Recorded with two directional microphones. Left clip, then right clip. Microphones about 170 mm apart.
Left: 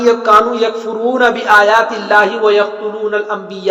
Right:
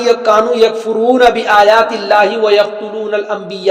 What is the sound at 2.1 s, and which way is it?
A man's voice, 40° right (ahead or behind).